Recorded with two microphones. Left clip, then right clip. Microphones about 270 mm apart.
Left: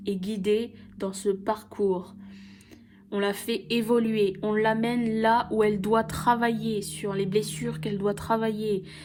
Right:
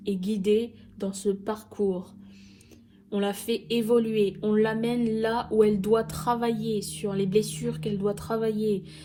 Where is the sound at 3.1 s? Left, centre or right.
Left.